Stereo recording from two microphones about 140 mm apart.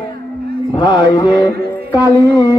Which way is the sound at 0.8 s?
30° left (ahead or behind).